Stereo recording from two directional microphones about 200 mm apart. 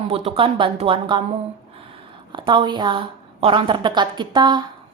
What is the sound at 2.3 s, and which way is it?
A woman's voice, 25° right (ahead or behind).